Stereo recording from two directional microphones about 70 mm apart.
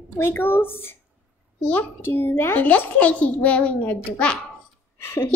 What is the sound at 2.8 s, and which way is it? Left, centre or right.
A child's voice, centre.